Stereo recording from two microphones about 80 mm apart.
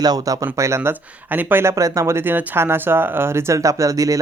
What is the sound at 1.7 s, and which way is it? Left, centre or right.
Speech, right.